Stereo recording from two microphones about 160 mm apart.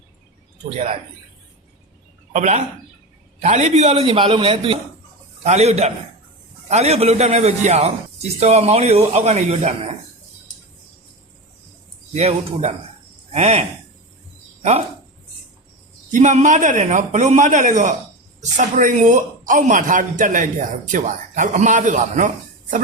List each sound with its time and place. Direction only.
0.7 s a man's voice: 40° right (ahead or behind)
2.3 s a man's voice: 45° right (ahead or behind)
12.1 s a man's voice: 40° right (ahead or behind)
16.1 s a man's voice: 50° right (ahead or behind)